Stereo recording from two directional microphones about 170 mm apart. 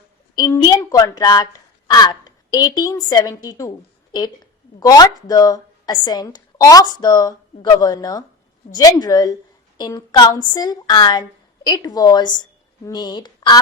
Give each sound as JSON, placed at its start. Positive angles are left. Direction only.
{"t": 0.3, "sound": "speech", "side_deg": 20}
{"t": 4.8, "sound": "a woman's voice", "side_deg": 20}